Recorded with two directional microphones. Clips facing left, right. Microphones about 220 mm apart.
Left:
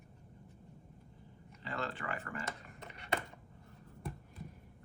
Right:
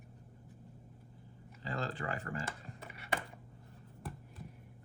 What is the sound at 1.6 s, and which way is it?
Speech, 35° right (ahead or behind).